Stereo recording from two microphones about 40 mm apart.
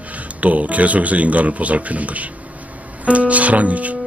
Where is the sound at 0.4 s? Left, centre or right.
Right.